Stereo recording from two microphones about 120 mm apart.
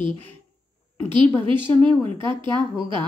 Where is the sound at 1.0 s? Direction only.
45° right (ahead or behind).